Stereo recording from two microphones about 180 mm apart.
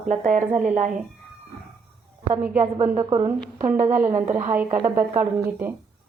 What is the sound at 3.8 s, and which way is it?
A woman's voice, 45° right (ahead or behind).